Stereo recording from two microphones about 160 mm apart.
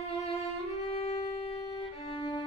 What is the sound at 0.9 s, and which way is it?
Music, 40° left (ahead or behind).